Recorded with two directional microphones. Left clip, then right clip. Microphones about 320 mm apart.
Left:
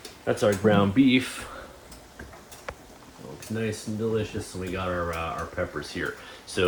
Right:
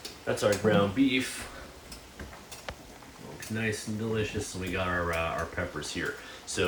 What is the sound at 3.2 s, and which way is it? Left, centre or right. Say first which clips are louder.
Speech: left 2 dB; centre.